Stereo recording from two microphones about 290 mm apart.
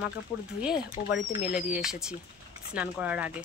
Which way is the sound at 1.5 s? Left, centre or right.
Centre.